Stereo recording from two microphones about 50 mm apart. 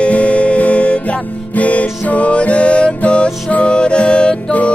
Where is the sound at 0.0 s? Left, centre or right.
Left.